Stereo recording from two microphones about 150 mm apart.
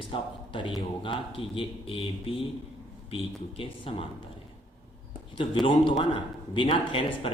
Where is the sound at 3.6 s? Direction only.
35° left (ahead or behind).